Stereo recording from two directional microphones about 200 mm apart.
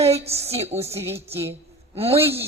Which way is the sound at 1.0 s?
10° right (ahead or behind).